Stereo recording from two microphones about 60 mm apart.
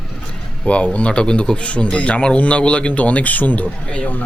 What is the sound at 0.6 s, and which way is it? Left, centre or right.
Speech, left.